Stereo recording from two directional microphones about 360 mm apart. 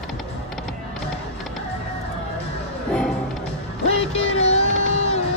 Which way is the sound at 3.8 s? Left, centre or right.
Centre.